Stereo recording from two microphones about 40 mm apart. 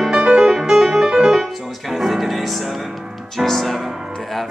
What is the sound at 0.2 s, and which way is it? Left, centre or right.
Music, centre.